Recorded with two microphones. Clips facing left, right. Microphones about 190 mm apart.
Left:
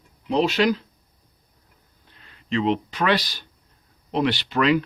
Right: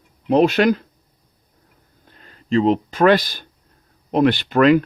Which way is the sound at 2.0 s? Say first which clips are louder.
Right 6 dB; 45° right (ahead or behind).